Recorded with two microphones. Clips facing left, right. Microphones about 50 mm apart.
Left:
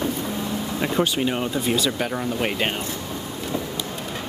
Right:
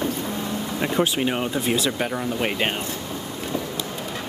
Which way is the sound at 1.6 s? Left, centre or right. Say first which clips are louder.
Left 1 dB; right.